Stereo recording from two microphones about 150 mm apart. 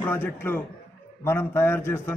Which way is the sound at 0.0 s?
15° left (ahead or behind).